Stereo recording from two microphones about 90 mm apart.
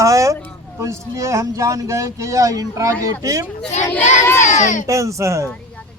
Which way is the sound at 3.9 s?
25° left (ahead or behind).